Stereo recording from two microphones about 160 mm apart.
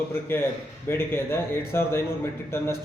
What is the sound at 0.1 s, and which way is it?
A man's voice, 15° left (ahead or behind).